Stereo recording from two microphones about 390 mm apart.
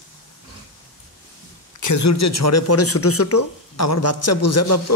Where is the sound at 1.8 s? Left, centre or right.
Left.